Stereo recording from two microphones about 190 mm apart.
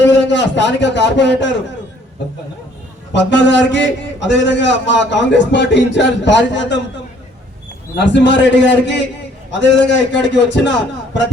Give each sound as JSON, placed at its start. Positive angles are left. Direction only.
{"t": 0.0, "sound": "a man's voice", "side_deg": 70}
{"t": 3.1, "sound": "a man's voice", "side_deg": 70}
{"t": 7.9, "sound": "a man's voice", "side_deg": 70}